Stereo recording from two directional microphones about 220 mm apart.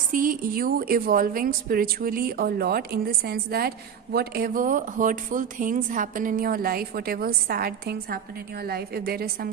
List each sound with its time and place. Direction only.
0.1 s a woman's voice: 40° right (ahead or behind)